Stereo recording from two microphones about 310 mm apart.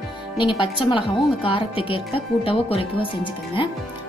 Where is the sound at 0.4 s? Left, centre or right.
Centre.